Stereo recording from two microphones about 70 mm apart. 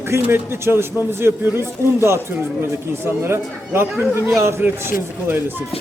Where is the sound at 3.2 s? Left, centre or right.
Right.